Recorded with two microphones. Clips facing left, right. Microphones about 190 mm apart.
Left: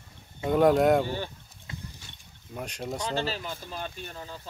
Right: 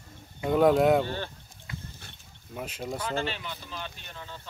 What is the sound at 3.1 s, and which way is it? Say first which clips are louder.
Speech: left 1 dB; 35° left (ahead or behind).